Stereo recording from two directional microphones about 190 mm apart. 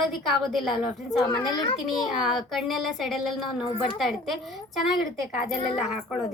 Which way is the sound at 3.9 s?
Centre (ahead or behind).